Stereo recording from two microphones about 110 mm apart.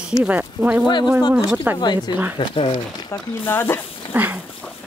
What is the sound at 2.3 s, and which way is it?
Speech, 55° left (ahead or behind).